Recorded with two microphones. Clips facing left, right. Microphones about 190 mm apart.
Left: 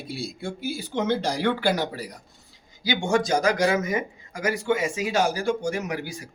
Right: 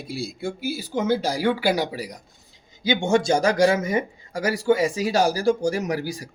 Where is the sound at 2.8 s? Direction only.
25° right (ahead or behind).